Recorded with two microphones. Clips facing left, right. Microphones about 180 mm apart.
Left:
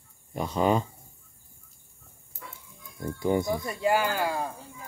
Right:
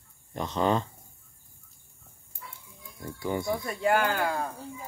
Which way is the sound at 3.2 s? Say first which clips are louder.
Left 5 dB; 20° left (ahead or behind).